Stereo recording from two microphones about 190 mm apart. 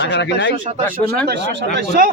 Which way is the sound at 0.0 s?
65° left (ahead or behind).